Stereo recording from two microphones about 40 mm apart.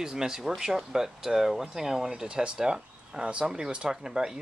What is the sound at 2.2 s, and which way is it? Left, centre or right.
Speech, right.